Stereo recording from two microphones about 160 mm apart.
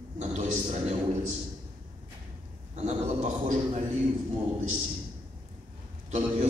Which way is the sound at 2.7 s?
45° right (ahead or behind).